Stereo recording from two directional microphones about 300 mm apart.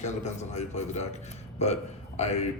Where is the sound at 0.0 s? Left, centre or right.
Left.